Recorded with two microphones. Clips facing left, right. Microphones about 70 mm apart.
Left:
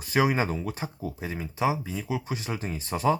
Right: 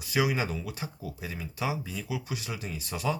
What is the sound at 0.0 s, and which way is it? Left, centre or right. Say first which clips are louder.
Speech: left 4 dB; left.